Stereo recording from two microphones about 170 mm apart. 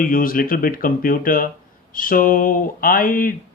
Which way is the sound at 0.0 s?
55° left (ahead or behind).